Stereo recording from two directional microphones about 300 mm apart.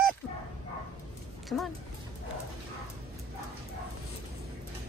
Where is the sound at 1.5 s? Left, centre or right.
Centre.